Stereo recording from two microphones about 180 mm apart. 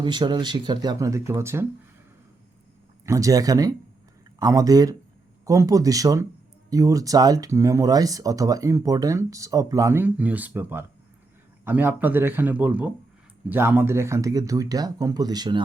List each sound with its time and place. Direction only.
0.0 s a man's voice: 25° right (ahead or behind)
3.1 s a man's voice: 20° right (ahead or behind)